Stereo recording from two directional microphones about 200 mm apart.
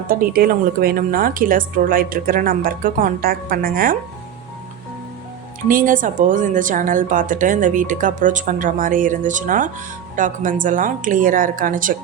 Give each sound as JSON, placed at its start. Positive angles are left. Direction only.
{"t": 0.1, "sound": "a woman's voice", "side_deg": -45}
{"t": 5.6, "sound": "a woman's voice", "side_deg": -40}